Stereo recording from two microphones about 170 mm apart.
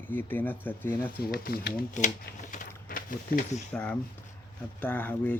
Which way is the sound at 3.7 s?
10° left (ahead or behind).